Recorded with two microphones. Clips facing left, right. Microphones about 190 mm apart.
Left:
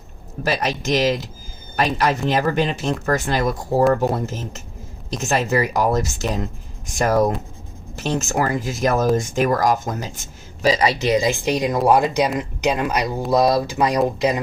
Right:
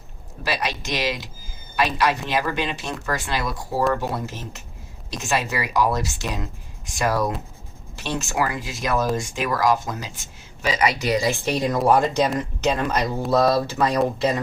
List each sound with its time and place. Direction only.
0.4 s speech: 45° left (ahead or behind); by 14.4 s 15° left (ahead or behind)